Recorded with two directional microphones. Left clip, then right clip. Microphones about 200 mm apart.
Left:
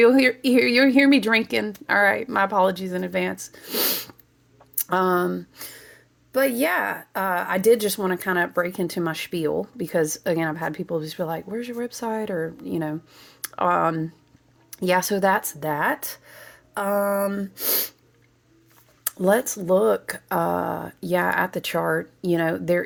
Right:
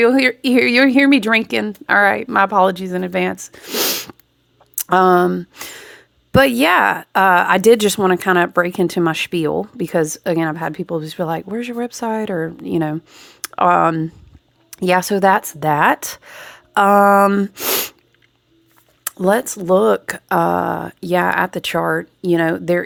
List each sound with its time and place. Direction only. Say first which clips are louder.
0.0 s speech: right 3 dB; 20° right (ahead or behind); by 17.9 s 45° right (ahead or behind)
19.0 s speech: right 4 dB; 20° right (ahead or behind)